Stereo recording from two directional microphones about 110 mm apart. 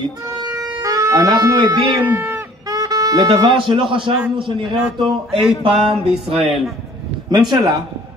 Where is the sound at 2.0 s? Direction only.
15° right (ahead or behind).